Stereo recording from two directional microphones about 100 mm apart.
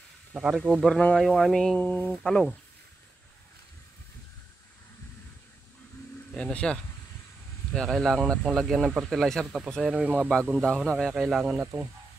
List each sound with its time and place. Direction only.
0.3 s speech: 10° right (ahead or behind)
0.6 s speech: 5° left (ahead or behind)
2.2 s speech: 5° left (ahead or behind)
6.3 s speech: 10° left (ahead or behind)
9.8 s speech: 10° right (ahead or behind)
10.5 s speech: 5° left (ahead or behind)
11.6 s speech: 20° right (ahead or behind)